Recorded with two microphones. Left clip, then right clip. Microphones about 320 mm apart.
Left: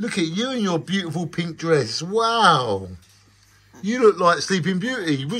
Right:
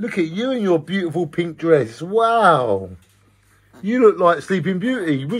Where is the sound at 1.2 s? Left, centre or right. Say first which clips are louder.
Right 6 dB; centre.